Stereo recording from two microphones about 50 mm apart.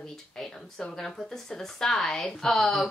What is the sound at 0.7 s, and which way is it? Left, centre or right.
Speech, centre.